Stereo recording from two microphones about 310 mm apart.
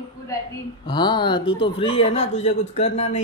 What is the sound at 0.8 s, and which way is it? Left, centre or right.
Speech, centre.